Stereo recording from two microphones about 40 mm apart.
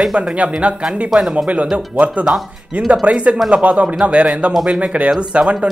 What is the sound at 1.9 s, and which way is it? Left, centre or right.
Speech, right.